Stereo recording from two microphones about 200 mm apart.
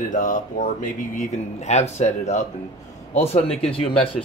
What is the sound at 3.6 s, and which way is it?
Speech, 30° left (ahead or behind).